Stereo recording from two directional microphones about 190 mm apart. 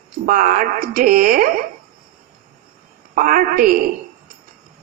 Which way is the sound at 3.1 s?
45° right (ahead or behind).